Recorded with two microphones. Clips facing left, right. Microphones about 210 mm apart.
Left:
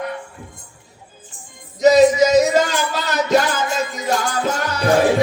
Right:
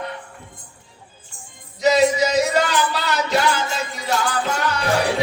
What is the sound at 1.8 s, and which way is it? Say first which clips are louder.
Music: left 5 dB; 45° left (ahead or behind).